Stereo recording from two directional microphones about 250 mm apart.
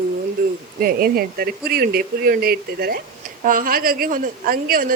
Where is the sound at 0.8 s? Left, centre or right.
Right.